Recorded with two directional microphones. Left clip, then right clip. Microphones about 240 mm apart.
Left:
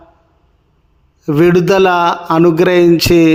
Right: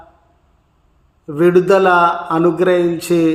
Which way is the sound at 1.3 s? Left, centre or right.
Left.